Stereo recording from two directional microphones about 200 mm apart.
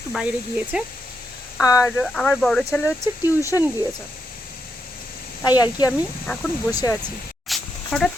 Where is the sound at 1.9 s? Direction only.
5° left (ahead or behind).